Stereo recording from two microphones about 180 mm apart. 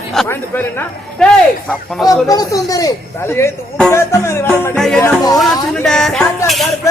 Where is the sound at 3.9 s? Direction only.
15° left (ahead or behind).